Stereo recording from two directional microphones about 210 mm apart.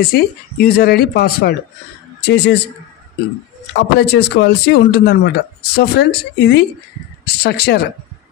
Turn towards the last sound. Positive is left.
turn(degrees=50)  # may be behind; listen again after turning